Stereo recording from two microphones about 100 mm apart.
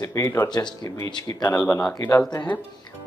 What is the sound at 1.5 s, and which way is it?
Speech, 30° left (ahead or behind).